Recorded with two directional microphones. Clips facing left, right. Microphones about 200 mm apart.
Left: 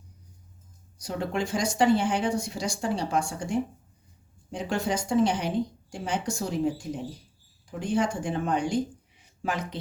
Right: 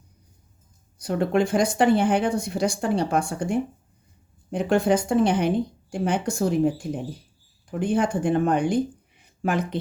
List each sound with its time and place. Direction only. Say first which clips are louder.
0.9 s speech: right 8 dB; 60° right (ahead or behind)